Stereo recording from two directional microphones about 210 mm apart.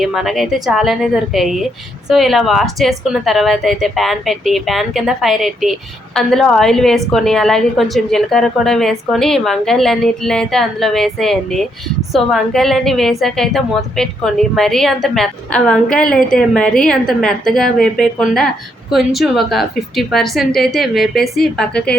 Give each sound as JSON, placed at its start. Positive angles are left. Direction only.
{"t": 0.0, "sound": "a woman's voice", "side_deg": 0}